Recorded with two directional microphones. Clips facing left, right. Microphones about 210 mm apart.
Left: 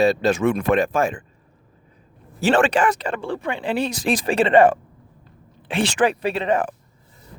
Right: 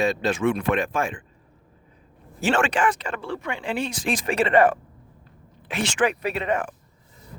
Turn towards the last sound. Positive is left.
turn(degrees=30)  # may be behind; listen again after turning